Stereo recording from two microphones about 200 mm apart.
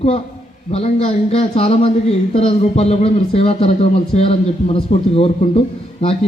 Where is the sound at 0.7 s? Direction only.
30° left (ahead or behind).